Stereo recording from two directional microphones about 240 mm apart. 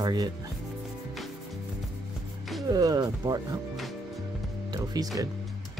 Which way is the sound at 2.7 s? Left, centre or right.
Centre.